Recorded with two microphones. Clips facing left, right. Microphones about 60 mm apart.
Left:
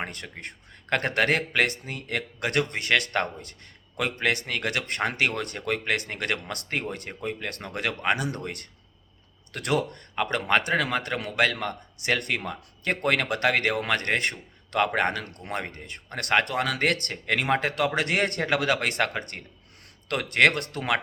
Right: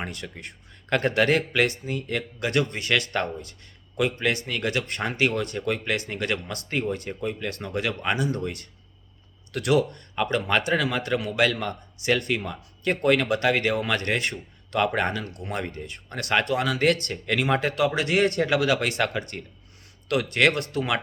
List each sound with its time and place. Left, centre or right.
0.0 s a man's voice: left